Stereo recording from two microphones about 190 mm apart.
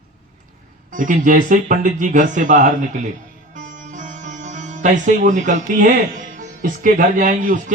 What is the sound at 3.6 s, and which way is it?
Music, 40° right (ahead or behind).